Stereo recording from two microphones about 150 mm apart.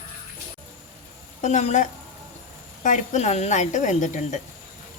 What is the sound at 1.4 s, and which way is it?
A woman's voice, 50° left (ahead or behind).